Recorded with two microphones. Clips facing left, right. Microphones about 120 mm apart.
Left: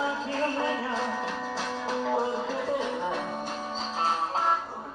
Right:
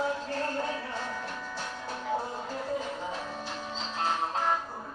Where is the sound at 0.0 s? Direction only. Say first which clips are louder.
Left 2 dB; 90° left; by 3.5 s 60° left (ahead or behind).